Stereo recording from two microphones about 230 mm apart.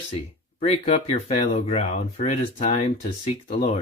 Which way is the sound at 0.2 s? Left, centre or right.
Left.